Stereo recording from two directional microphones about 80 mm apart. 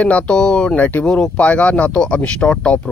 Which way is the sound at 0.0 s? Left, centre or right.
Centre.